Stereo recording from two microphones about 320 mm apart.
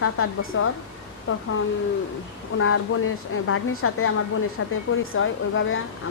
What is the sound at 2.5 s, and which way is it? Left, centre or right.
A woman's voice, left.